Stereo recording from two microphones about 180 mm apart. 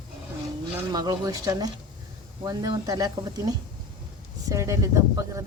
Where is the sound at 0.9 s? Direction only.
20° right (ahead or behind).